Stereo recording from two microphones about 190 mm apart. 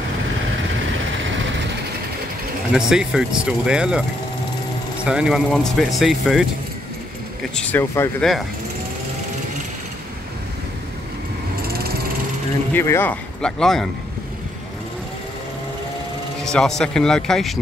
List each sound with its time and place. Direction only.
2.7 s speech: 5° right (ahead or behind)
5.0 s speech: 5° right (ahead or behind)
7.5 s speech: 10° left (ahead or behind)
8.2 s speech: centre (ahead or behind)
11.6 s jackhammer: 55° right (ahead or behind)
12.7 s speech: 10° left (ahead or behind)
16.4 s speech: 5° left (ahead or behind)